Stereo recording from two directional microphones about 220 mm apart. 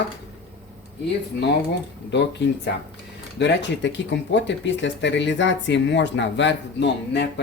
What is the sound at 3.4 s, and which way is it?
Speech, 55° left (ahead or behind).